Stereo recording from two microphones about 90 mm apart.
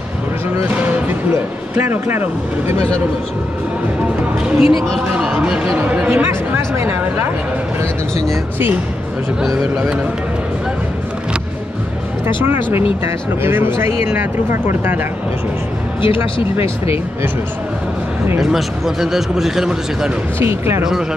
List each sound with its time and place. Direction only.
0.6 s music: 20° right (ahead or behind)
1.9 s speech: 25° right (ahead or behind)
4.6 s speech: centre (ahead or behind)
5.1 s speech: 10° right (ahead or behind); by 7.2 s 25° right (ahead or behind)
9.4 s speech: centre (ahead or behind)
13.0 s speech: 25° right (ahead or behind)
16.3 s speech: 90° left
18.4 s speech: 5° right (ahead or behind)
20.3 s speech: 25° right (ahead or behind)